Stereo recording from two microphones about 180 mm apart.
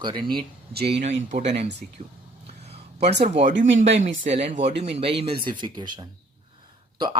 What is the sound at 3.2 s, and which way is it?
Speech, 35° right (ahead or behind).